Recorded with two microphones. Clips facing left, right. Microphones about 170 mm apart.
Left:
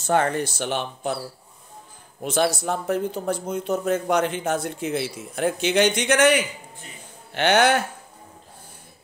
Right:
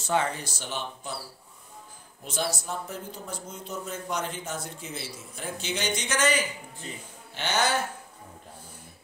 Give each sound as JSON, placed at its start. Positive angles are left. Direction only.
{"t": 0.0, "sound": "speech", "side_deg": 55}
{"t": 2.2, "sound": "speech", "side_deg": 65}